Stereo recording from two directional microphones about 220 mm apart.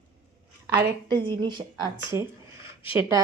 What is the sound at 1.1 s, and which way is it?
A woman's voice, 20° right (ahead or behind).